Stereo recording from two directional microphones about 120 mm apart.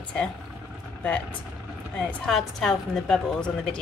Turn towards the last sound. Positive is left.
turn(degrees=5)  # may be behind; listen again after turning